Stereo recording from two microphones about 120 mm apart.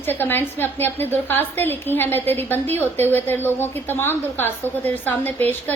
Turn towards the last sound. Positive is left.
turn(degrees=15)  # may be behind; listen again after turning